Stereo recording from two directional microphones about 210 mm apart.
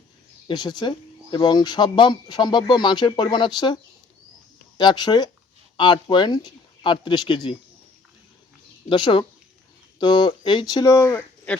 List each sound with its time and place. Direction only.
0.4 s speech: 20° left (ahead or behind)
4.8 s speech: 20° left (ahead or behind)
8.9 s speech: 25° left (ahead or behind)